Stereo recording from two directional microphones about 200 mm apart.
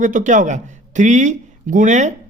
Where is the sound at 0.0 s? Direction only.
40° right (ahead or behind).